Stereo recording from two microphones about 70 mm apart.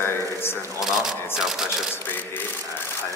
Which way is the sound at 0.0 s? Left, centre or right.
Left.